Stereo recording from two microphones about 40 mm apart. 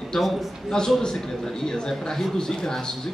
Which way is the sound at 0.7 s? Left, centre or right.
Centre.